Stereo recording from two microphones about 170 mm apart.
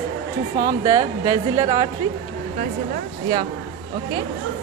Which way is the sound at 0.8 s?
20° right (ahead or behind).